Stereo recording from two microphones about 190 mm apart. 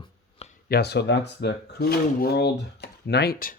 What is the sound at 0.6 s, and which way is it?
Speech, 60° left (ahead or behind).